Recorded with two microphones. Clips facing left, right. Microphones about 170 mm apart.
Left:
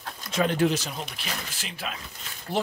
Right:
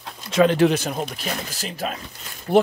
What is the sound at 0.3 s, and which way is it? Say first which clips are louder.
Speech: right 7 dB; 90° right.